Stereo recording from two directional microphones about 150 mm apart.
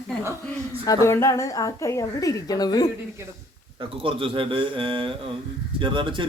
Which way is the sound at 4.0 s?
35° right (ahead or behind).